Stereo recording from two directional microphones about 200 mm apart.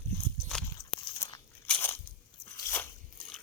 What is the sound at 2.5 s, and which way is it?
Biting, 10° left (ahead or behind).